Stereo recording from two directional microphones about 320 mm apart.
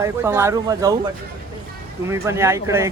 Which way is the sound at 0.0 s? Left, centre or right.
Centre.